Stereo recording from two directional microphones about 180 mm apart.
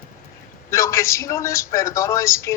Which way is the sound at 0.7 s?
15° left (ahead or behind).